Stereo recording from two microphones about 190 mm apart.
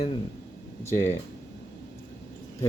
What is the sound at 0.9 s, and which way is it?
Speech, 10° left (ahead or behind).